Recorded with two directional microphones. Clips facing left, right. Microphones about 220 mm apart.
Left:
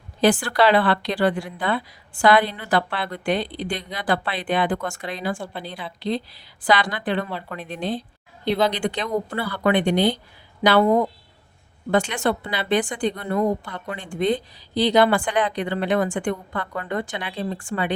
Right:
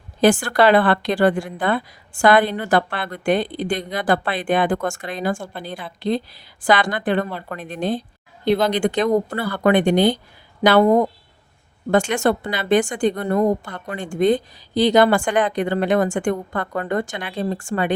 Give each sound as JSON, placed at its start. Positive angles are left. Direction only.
{"t": 0.2, "sound": "a woman's voice", "side_deg": -45}